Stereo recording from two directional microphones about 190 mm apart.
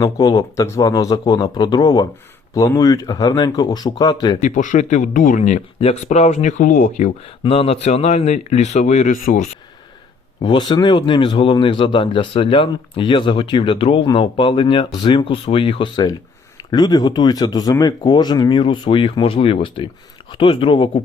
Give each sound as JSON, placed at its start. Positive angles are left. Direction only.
{"t": 0.0, "sound": "speech", "side_deg": 20}
{"t": 4.4, "sound": "speech", "side_deg": 40}
{"t": 10.4, "sound": "speech", "side_deg": 25}